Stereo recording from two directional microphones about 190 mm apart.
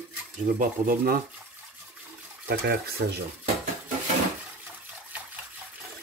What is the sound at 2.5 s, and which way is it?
Speech, 55° right (ahead or behind).